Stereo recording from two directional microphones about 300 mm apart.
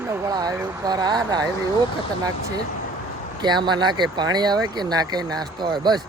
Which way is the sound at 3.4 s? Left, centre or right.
Centre.